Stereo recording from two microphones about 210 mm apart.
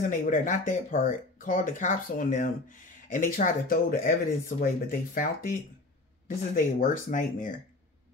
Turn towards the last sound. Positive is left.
turn(degrees=40)  # may be behind; listen again after turning